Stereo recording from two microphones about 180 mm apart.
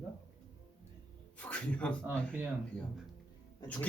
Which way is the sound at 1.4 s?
5° left (ahead or behind).